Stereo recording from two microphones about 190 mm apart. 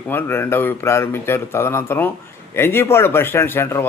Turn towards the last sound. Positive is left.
turn(degrees=15)  # may be behind; listen again after turning